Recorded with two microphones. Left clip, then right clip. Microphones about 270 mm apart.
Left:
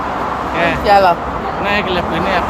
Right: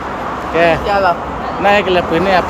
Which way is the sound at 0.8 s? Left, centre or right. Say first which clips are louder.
Left 4 dB; left.